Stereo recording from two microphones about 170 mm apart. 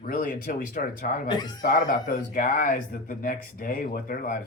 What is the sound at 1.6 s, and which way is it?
Speech, 55° left (ahead or behind).